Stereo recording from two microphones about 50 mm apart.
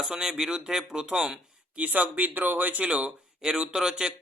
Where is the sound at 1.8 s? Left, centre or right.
Right.